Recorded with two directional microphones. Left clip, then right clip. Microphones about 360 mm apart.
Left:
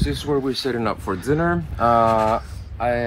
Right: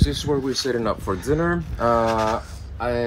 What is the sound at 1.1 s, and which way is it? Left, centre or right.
Speech, left.